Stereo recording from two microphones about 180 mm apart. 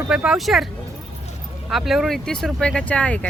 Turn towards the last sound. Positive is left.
turn(degrees=5)  # may be behind; listen again after turning